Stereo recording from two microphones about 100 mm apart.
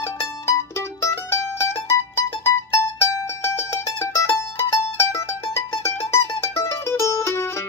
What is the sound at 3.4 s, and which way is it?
Music, 30° left (ahead or behind).